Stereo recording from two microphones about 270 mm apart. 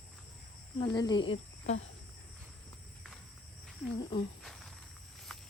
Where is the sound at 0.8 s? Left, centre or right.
Centre.